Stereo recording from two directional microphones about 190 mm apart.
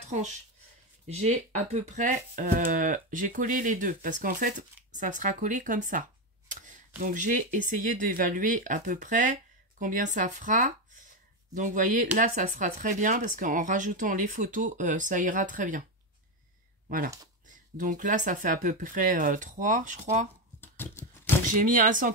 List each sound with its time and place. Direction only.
0.0 s speech: 40° right (ahead or behind)
6.5 s tick-tock: 40° right (ahead or behind)
7.0 s speech: 45° right (ahead or behind)
17.5 s speech: 40° right (ahead or behind)
20.6 s a sound: 10° left (ahead or behind)
21.5 s speech: 45° right (ahead or behind)